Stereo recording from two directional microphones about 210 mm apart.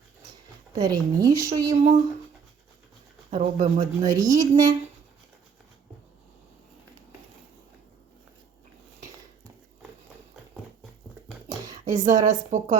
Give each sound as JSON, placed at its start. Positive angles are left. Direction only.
{"t": 0.8, "sound": "speech", "side_deg": -20}
{"t": 1.7, "sound": "speech", "side_deg": -35}
{"t": 3.2, "sound": "speech", "side_deg": -35}
{"t": 4.0, "sound": "speech", "side_deg": -15}
{"t": 11.7, "sound": "a sound", "side_deg": -35}
{"t": 12.2, "sound": "speech", "side_deg": -35}